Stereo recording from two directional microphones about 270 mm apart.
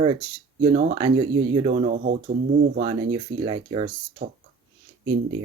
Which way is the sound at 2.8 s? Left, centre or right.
Centre.